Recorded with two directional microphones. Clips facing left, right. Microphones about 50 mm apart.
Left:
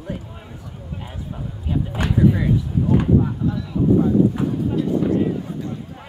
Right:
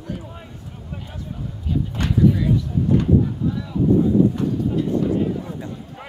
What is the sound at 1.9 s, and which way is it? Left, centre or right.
Speech, centre.